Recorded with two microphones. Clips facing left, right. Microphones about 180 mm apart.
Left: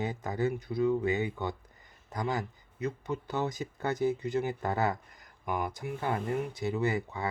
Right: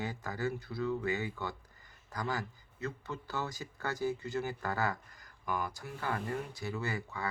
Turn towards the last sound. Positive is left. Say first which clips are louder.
# left 7 dB
turn(degrees=20)  # may be behind; listen again after turning